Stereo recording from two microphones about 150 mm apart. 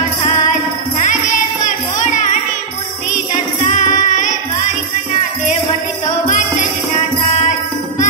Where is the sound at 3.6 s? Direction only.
55° left (ahead or behind).